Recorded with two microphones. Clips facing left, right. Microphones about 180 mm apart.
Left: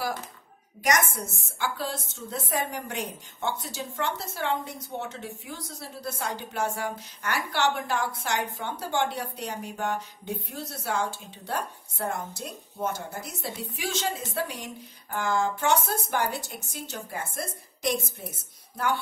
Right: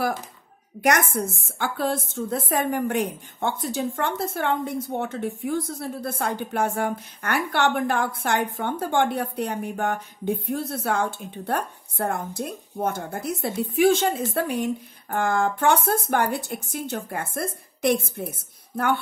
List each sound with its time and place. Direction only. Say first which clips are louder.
1.1 s speech: right 9 dB; 55° right (ahead or behind)